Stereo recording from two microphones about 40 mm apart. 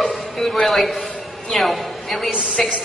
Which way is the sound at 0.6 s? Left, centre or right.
Centre.